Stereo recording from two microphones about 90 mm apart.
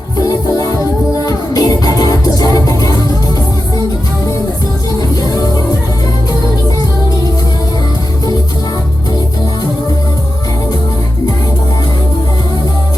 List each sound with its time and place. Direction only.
1.2 s music: 45° left (ahead or behind)
5.1 s music: 45° left (ahead or behind)